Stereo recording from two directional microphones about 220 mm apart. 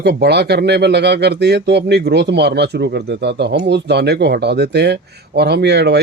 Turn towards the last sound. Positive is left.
turn(degrees=-50)  # may be behind; listen again after turning